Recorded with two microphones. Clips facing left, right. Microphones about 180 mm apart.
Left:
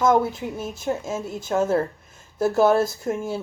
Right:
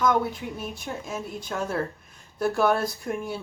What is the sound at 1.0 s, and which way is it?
Speech, 25° left (ahead or behind).